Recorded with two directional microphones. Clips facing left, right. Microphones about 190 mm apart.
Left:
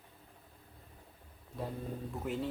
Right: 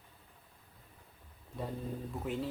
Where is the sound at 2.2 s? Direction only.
Centre (ahead or behind).